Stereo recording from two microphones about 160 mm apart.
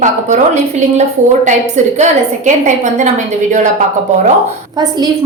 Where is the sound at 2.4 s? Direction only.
50° right (ahead or behind).